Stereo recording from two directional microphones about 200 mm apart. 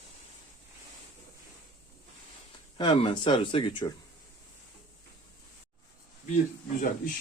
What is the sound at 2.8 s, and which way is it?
Speech, 25° left (ahead or behind).